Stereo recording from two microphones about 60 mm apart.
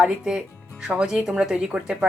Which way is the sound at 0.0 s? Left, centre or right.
Centre.